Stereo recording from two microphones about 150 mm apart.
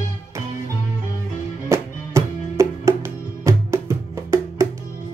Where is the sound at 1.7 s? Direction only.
20° right (ahead or behind).